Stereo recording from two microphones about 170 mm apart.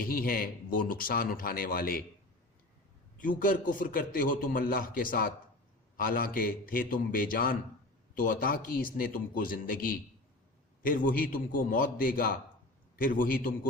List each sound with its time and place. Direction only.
0.0 s a man's voice: 60° left (ahead or behind)
3.2 s a man's voice: 55° left (ahead or behind)